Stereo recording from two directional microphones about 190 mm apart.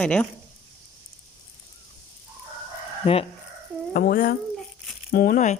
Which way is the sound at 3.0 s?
30° left (ahead or behind).